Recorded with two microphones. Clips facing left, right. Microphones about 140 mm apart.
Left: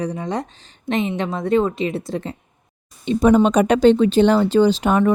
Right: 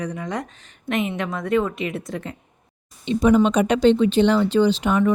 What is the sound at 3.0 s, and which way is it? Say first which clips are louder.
Speech: left 2 dB; 45° left (ahead or behind).